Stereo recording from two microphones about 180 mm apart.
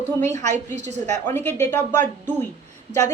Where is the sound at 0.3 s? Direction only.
40° right (ahead or behind).